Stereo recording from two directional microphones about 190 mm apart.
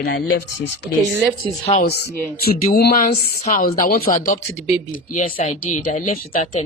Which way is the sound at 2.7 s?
50° left (ahead or behind).